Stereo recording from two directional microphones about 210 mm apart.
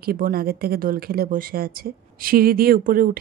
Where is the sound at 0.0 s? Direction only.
45° right (ahead or behind).